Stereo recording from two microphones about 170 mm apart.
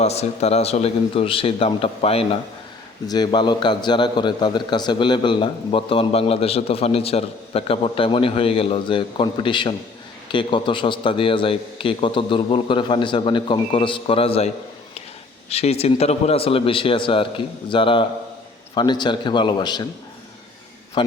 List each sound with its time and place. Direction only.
0.0 s a man's voice: 40° left (ahead or behind)
3.1 s a man's voice: 25° left (ahead or behind)